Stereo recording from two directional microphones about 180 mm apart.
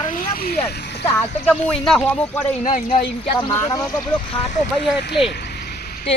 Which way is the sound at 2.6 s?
40° left (ahead or behind).